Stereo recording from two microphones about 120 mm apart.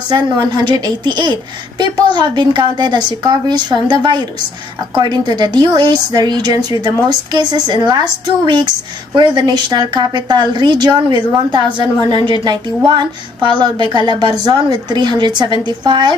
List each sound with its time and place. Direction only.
0.1 s a woman's voice: 35° right (ahead or behind)
9.1 s a woman's voice: 35° right (ahead or behind)